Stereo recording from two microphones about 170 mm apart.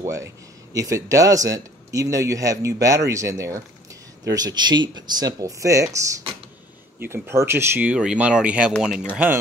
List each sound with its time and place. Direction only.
0.0 s speech: 15° right (ahead or behind)